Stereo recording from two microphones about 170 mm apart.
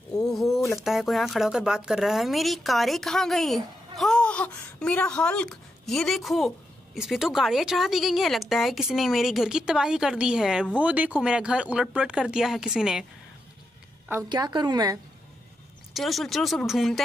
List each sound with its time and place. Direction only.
0.3 s a sound: centre (ahead or behind)
0.8 s speech: centre (ahead or behind)
14.3 s a woman's voice: 25° right (ahead or behind)
15.9 s speech: centre (ahead or behind)